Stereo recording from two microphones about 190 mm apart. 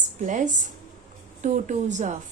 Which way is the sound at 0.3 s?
40° right (ahead or behind).